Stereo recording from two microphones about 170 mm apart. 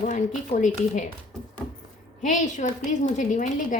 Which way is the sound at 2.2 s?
50° left (ahead or behind).